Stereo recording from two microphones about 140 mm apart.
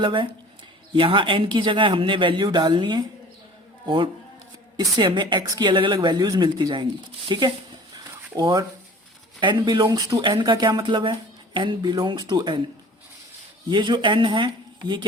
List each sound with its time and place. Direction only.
0.0 s speech: 35° right (ahead or behind)
7.9 s a sound: 30° right (ahead or behind)
9.4 s speech: 35° right (ahead or behind)
13.7 s speech: 35° right (ahead or behind)